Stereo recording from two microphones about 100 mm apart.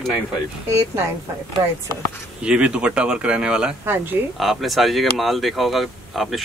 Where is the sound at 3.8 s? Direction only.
20° right (ahead or behind).